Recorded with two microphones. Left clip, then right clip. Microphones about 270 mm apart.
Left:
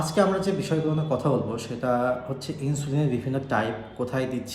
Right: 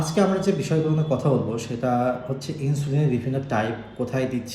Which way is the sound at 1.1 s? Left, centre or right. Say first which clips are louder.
Right 1 dB; centre.